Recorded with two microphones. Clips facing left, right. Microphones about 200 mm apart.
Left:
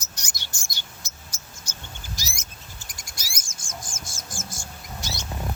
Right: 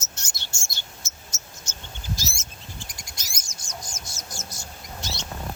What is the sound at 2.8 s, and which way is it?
Bird, 45° left (ahead or behind).